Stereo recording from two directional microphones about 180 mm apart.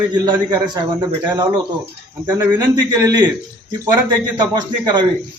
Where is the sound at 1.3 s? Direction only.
25° right (ahead or behind).